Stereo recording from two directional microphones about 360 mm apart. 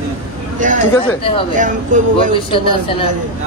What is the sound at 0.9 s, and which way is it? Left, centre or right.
Speech, centre.